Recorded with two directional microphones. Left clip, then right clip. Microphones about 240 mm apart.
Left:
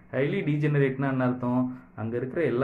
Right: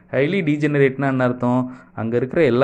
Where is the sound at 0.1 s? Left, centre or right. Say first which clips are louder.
Right 8 dB; right.